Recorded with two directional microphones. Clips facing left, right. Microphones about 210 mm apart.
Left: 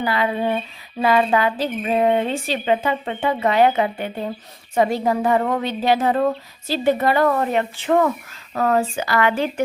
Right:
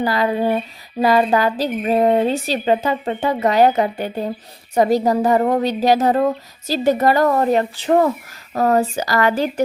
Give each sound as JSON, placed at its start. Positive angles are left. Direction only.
{"t": 0.0, "sound": "speech", "side_deg": -40}